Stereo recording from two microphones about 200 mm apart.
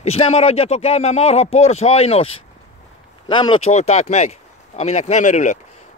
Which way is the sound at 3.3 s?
25° left (ahead or behind).